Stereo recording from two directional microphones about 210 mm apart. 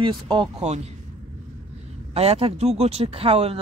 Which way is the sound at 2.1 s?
30° right (ahead or behind).